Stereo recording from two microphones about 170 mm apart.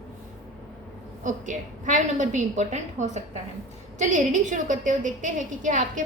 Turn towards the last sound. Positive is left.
turn(degrees=-45)  # may be behind; listen again after turning